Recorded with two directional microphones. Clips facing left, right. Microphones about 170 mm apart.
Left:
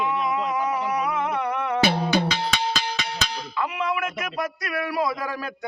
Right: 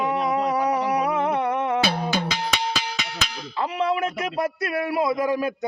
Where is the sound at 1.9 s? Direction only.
25° left (ahead or behind).